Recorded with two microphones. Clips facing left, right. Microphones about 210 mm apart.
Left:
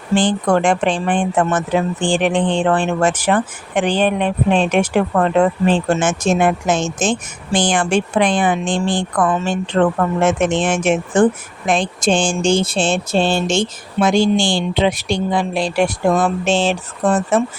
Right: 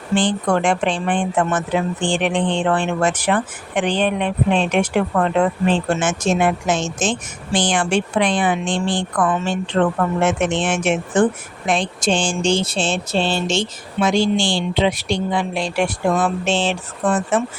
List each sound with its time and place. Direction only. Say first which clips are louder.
0.2 s speech: left 3 dB; 45° left (ahead or behind)